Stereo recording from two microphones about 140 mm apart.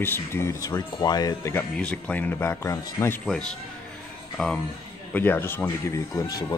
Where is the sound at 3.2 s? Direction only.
5° left (ahead or behind).